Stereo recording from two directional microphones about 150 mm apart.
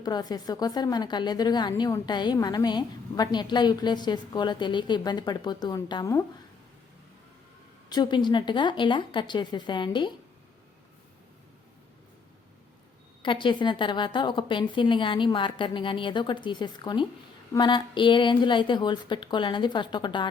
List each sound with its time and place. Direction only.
0.0 s a woman's voice: 25° left (ahead or behind)
7.9 s a woman's voice: 30° left (ahead or behind)
13.2 s a woman's voice: 30° left (ahead or behind)